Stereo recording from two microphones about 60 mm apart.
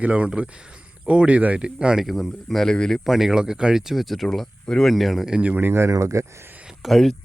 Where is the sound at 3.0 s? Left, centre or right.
Centre.